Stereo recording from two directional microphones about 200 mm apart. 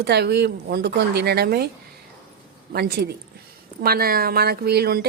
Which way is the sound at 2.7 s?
50° right (ahead or behind).